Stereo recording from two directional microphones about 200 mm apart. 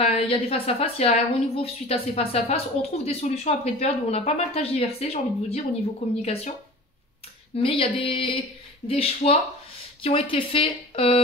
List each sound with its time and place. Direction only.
0.0 s a woman's voice: 30° left (ahead or behind)
7.5 s a woman's voice: 25° left (ahead or behind)